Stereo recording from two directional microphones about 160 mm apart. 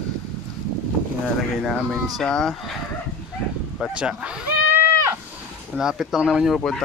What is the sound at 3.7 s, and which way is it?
Speech, 5° right (ahead or behind).